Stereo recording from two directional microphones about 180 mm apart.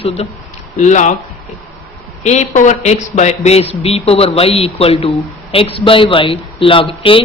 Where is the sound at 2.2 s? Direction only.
40° left (ahead or behind).